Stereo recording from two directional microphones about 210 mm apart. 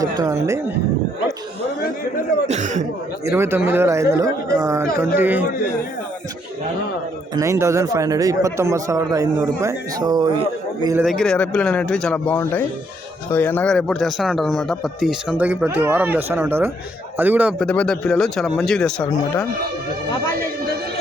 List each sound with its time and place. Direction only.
2.5 s speech: 35° right (ahead or behind)
3.2 s a man's voice: 10° right (ahead or behind)
7.3 s a man's voice: 15° right (ahead or behind)
10.9 s a man's voice: centre (ahead or behind)
17.6 s speech: 5° left (ahead or behind)